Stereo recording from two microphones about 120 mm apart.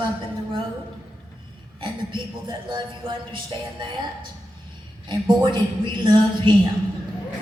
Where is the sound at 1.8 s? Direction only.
40° right (ahead or behind).